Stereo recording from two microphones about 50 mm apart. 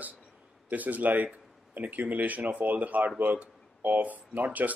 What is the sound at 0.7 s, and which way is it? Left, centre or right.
Speech, right.